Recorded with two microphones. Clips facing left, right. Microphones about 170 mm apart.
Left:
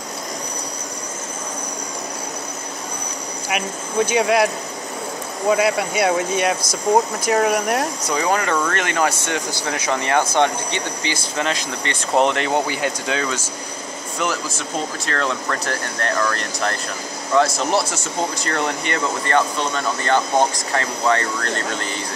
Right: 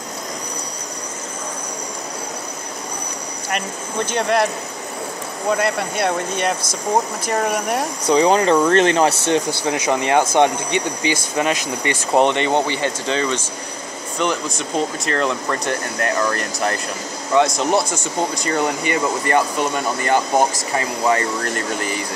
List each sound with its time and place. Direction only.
3.4 s speech: 5° left (ahead or behind)
5.5 s speech: 5° left (ahead or behind)
8.1 s speech: 20° right (ahead or behind)